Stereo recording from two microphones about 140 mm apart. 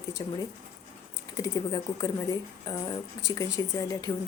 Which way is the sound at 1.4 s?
30° left (ahead or behind).